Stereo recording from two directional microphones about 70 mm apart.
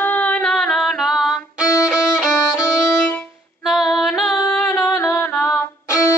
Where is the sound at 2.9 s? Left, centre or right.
Centre.